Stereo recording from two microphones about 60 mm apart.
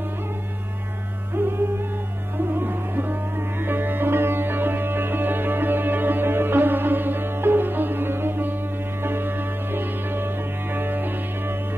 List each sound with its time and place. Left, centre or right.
1.4 s music: right
2.3 s sitar: right
9.0 s music: right